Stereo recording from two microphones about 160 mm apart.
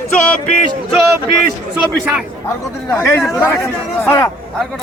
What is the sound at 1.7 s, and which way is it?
Speech, 5° right (ahead or behind).